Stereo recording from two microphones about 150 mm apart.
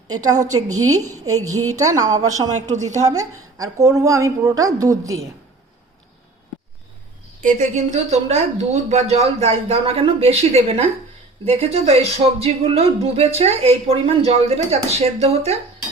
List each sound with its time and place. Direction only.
0.5 s a woman's voice: 25° right (ahead or behind)
2.6 s speech: 50° right (ahead or behind)
3.1 s a woman's voice: 25° right (ahead or behind)
7.4 s speech: 55° right (ahead or behind)